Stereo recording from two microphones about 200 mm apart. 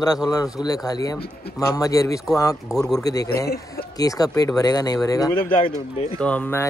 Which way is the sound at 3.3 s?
50° left (ahead or behind).